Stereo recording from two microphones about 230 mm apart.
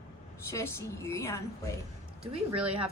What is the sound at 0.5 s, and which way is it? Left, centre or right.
Speech, centre.